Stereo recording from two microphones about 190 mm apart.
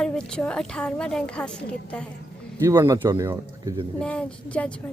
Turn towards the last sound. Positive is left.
turn(degrees=5)  # may be behind; listen again after turning